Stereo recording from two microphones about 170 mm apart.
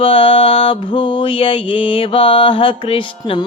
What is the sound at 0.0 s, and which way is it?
Music, 35° left (ahead or behind).